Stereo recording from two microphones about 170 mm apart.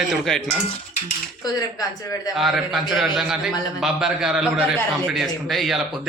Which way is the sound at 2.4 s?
Centre (ahead or behind).